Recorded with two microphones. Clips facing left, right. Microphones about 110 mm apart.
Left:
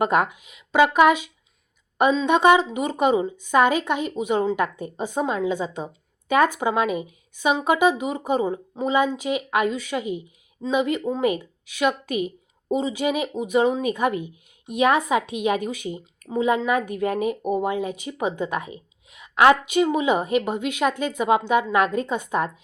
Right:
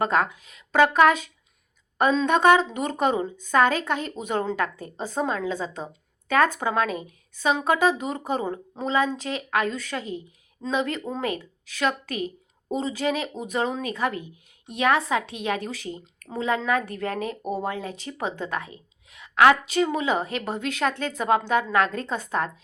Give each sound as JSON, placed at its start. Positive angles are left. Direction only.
{"t": 0.0, "sound": "speech", "side_deg": 15}